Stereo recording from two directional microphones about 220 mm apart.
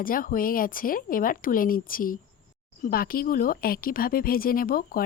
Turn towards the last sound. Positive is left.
turn(degrees=40)  # may be behind; listen again after turning